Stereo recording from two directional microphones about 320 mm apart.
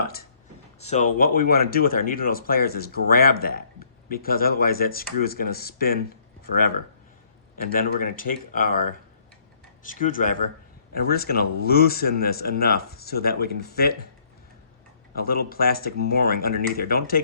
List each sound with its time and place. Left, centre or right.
0.0 s a sound: left
0.8 s speech: left
7.5 s speech: left
15.1 s speech: left